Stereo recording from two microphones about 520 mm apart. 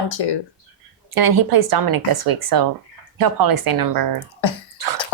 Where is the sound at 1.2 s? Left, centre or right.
Right.